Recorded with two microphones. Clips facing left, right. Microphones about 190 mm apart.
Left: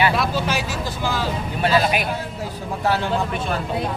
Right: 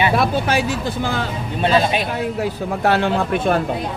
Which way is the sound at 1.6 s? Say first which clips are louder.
Right 2 dB; 25° right (ahead or behind).